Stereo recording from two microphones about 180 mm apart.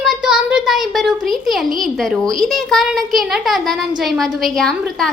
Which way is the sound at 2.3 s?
Centre (ahead or behind).